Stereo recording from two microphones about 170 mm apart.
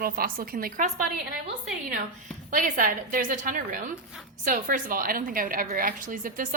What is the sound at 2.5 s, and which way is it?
A woman's voice, 55° right (ahead or behind).